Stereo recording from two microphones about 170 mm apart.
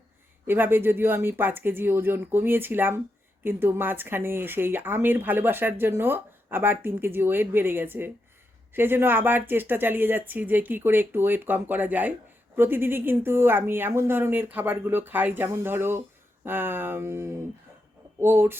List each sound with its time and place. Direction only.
0.4 s speech: 10° right (ahead or behind)